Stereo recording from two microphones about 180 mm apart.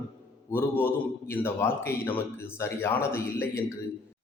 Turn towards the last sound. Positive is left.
turn(degrees=15)  # may be behind; listen again after turning